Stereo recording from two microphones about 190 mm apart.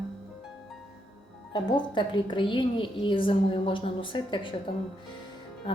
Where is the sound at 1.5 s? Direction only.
25° left (ahead or behind).